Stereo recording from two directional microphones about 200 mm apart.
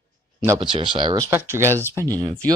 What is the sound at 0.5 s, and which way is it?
Speech, 25° right (ahead or behind).